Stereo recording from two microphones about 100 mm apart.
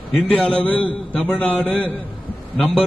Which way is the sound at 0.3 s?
15° left (ahead or behind).